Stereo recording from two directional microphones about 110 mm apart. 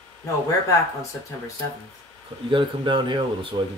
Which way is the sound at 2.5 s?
45° right (ahead or behind).